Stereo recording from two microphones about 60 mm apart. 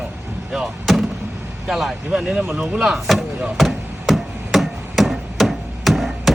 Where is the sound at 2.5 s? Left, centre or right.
Centre.